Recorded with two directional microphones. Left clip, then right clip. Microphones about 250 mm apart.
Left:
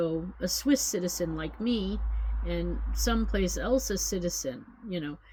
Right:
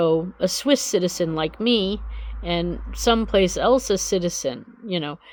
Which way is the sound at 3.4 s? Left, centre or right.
Right.